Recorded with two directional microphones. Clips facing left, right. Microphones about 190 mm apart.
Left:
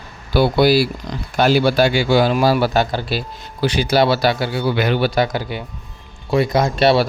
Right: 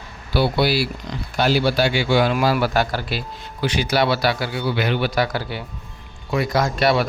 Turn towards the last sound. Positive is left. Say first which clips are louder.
# left 4 dB
turn(degrees=30)  # may be behind; listen again after turning